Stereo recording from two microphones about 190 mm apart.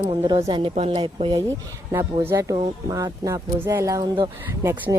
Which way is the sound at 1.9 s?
15° right (ahead or behind).